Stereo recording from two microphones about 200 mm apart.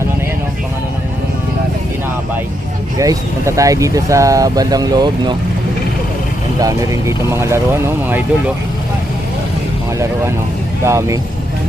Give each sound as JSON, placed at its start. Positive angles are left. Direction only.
{"t": 3.0, "sound": "speech", "side_deg": -15}
{"t": 6.6, "sound": "speech", "side_deg": -15}
{"t": 10.8, "sound": "speech", "side_deg": -15}